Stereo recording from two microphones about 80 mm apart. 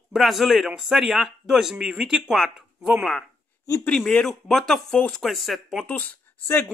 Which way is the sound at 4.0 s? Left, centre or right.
Centre.